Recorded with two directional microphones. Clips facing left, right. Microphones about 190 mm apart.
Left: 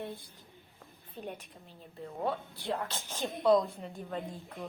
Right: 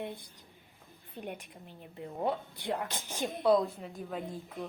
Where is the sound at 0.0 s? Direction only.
15° right (ahead or behind).